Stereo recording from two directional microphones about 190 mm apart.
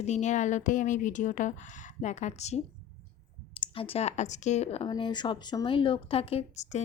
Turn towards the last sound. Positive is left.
turn(degrees=35)  # may be behind; listen again after turning